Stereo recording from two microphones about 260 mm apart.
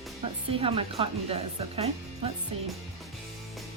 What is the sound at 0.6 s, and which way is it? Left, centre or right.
Speech, right.